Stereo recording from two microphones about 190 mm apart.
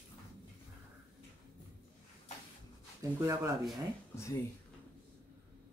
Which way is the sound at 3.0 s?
15° right (ahead or behind).